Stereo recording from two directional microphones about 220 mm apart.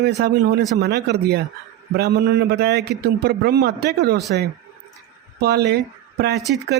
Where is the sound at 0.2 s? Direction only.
50° right (ahead or behind).